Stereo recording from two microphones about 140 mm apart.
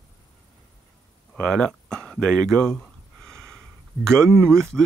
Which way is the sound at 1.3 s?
5° left (ahead or behind).